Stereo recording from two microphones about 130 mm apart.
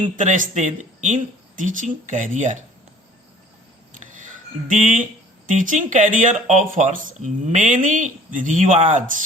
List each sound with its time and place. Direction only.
0.2 s speech: 70° right (ahead or behind)
4.0 s music: 80° right
5.5 s speech: 80° right